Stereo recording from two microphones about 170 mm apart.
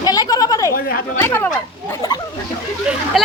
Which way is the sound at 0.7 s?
60° left (ahead or behind).